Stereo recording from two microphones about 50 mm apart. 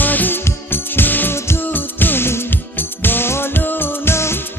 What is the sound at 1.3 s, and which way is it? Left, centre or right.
Music, left.